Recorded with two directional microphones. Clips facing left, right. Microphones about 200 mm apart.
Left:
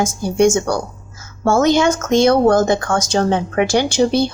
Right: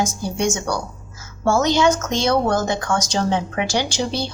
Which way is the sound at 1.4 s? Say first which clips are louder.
Left 3 dB; 50° left (ahead or behind).